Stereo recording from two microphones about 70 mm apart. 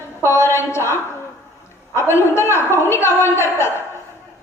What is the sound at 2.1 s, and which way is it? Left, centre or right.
A man's voice, left.